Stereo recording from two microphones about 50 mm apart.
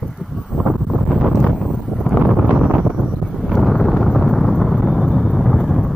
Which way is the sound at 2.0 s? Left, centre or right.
Centre.